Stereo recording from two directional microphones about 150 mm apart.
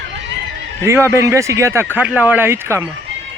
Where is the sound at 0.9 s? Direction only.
20° right (ahead or behind).